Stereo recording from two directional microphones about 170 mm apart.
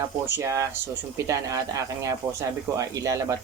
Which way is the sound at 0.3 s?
15° right (ahead or behind).